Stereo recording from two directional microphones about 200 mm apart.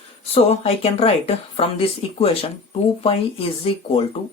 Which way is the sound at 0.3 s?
30° left (ahead or behind).